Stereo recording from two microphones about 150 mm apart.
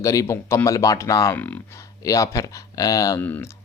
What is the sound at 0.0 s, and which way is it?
Speech, 20° left (ahead or behind).